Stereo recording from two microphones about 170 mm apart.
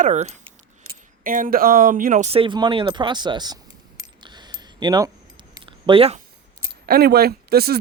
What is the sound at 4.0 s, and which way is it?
Camera, 25° right (ahead or behind).